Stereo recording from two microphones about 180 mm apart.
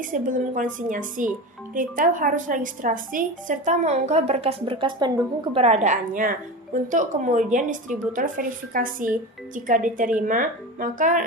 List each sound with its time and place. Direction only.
0.0 s a woman's voice: 45° right (ahead or behind)